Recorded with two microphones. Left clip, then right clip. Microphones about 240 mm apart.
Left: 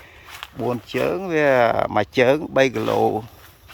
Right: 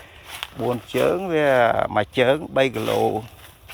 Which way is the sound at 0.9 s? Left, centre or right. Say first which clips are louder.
Right 1 dB; centre.